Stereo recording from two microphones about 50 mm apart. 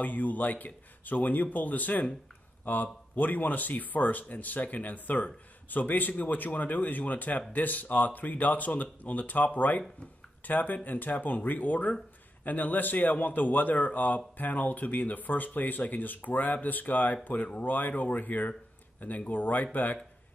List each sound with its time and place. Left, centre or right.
0.0 s speech: left